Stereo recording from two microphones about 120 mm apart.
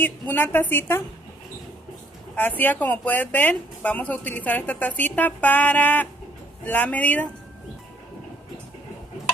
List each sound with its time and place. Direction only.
0.0 s speech: 15° left (ahead or behind)
2.3 s speech: 15° left (ahead or behind)